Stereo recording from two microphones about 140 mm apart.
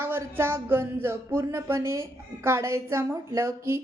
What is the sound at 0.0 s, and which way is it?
A woman's voice, 15° right (ahead or behind).